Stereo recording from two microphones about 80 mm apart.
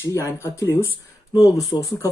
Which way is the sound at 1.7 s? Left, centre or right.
Left.